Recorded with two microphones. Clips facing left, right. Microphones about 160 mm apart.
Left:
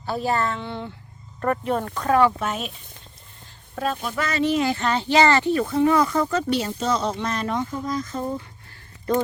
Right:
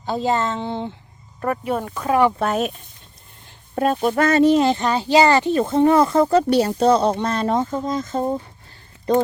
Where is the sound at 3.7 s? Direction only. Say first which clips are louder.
Right 8 dB; 60° right (ahead or behind).